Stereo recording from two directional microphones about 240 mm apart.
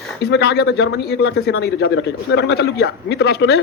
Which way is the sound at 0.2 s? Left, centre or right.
Left.